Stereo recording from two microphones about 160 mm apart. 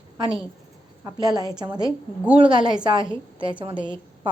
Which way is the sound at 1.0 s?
25° right (ahead or behind).